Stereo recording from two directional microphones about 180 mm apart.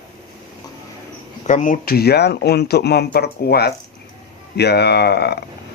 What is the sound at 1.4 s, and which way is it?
Speech, 45° left (ahead or behind).